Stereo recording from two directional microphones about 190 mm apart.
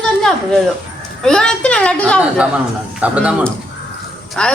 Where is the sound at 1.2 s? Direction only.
5° left (ahead or behind).